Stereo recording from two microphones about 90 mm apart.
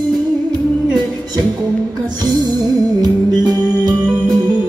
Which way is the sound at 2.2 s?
50° right (ahead or behind).